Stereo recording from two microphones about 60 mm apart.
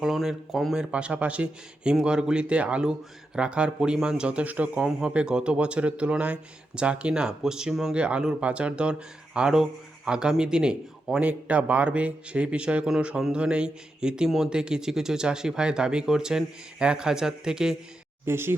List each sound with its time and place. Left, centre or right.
0.0 s speech: centre
0.9 s speech: centre
7.9 s speech: centre
14.3 s speech: centre
14.5 s speech: centre
18.3 s speech: right